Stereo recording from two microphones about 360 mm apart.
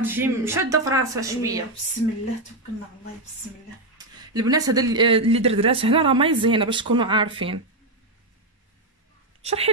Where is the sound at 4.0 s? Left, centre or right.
Centre.